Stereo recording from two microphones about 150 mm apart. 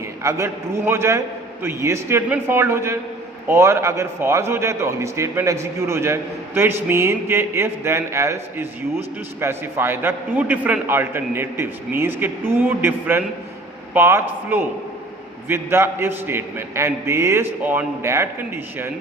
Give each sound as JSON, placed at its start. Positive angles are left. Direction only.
{"t": 0.2, "sound": "a man's voice", "side_deg": -20}